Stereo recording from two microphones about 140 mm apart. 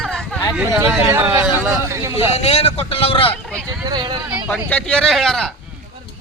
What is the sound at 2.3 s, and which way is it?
Speech, 45° left (ahead or behind).